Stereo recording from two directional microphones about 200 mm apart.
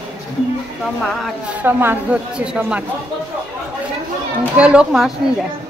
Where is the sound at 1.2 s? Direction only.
10° right (ahead or behind).